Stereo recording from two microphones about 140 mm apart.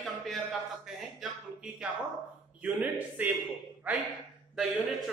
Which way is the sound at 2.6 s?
10° right (ahead or behind).